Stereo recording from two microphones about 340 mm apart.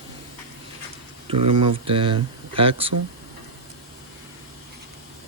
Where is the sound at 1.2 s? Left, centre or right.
Centre.